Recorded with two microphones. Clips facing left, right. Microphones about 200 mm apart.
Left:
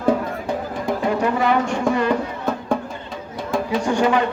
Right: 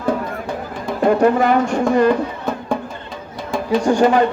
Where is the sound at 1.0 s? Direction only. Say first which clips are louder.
Right 7 dB; 50° right (ahead or behind).